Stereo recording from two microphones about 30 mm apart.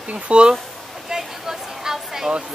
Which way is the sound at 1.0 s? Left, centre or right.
Centre.